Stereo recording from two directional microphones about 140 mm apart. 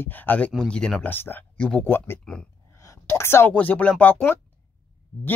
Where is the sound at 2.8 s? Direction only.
20° left (ahead or behind).